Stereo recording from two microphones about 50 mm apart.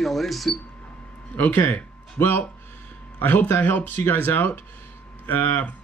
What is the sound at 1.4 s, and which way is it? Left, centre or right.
Speech, left.